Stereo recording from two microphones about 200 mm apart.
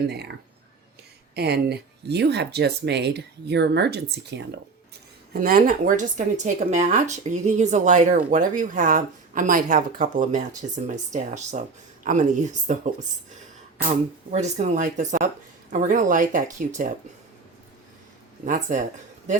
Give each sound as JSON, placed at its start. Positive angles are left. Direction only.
{"t": 1.4, "sound": "speech", "side_deg": -55}
{"t": 5.3, "sound": "speech", "side_deg": -45}
{"t": 18.4, "sound": "speech", "side_deg": -40}